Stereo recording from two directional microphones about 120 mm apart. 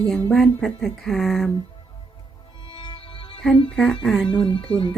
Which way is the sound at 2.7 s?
40° left (ahead or behind).